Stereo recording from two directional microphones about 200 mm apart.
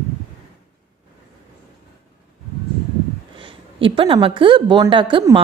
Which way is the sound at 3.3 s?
25° right (ahead or behind).